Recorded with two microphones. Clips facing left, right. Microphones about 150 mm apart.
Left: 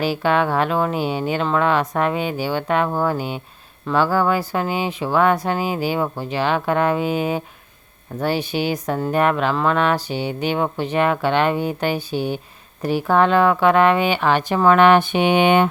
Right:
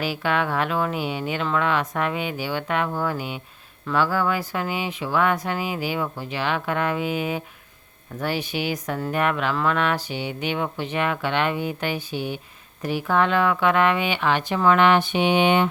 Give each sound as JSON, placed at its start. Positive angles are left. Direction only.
{"t": 0.0, "sound": "speech", "side_deg": 30}